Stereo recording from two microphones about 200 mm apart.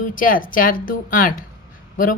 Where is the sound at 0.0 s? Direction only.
45° left (ahead or behind).